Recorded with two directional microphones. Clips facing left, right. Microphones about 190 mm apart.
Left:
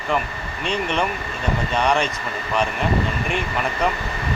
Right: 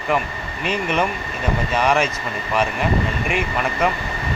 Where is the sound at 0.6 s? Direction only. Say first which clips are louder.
Right 2 dB; 5° right (ahead or behind).